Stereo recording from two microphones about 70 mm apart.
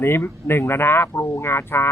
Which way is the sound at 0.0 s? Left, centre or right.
Left.